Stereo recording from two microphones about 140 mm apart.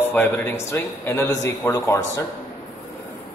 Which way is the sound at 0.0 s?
15° left (ahead or behind).